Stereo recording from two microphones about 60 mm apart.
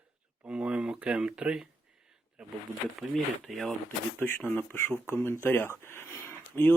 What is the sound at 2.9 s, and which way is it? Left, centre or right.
Speech, centre.